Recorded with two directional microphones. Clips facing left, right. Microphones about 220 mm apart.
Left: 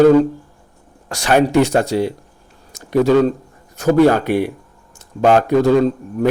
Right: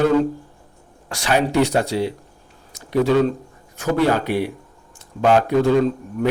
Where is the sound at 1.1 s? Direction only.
45° left (ahead or behind).